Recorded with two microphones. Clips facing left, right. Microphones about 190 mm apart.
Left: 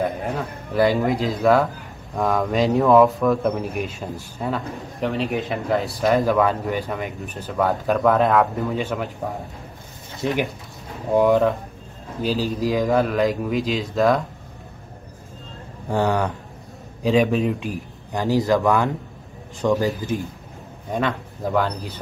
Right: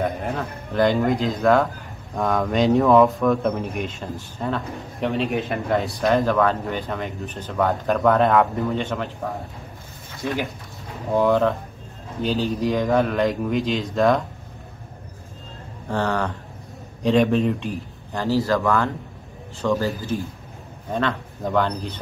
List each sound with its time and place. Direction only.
0.0 s speech: centre (ahead or behind)
10.2 s speech: 20° left (ahead or behind)
12.2 s speech: 5° left (ahead or behind)
15.9 s speech: 10° left (ahead or behind)
18.1 s speech: 15° left (ahead or behind)